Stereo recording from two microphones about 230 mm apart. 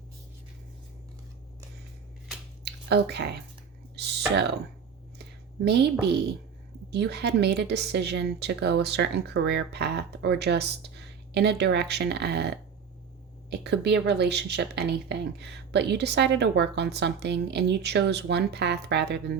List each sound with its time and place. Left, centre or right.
2.6 s speech: right
3.9 s clicking: right
4.3 s a woman's voice: right
5.6 s a woman's voice: right